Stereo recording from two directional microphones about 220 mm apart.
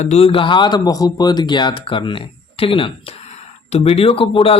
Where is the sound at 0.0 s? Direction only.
30° left (ahead or behind).